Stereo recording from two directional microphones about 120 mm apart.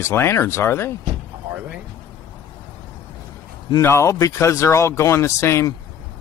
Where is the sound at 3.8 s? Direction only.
25° left (ahead or behind).